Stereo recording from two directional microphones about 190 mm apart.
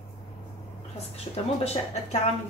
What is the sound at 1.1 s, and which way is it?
Speech, 35° left (ahead or behind).